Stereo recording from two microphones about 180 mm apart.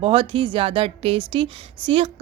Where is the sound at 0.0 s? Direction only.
30° right (ahead or behind).